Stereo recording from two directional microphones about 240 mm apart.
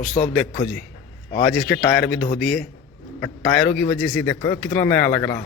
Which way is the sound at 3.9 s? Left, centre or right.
Centre.